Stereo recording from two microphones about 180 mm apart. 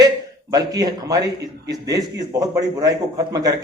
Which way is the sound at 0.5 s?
20° right (ahead or behind).